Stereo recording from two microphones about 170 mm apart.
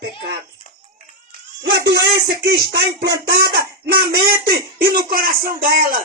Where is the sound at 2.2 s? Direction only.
70° right (ahead or behind).